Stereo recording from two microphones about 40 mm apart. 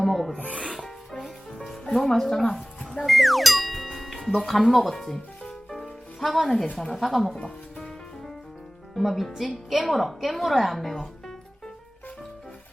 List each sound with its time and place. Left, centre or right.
0.0 s a woman's voice: centre
1.7 s speech: centre
3.1 s music: centre
4.4 s a woman's voice: centre
7.4 s music: centre
9.0 s a woman's voice: centre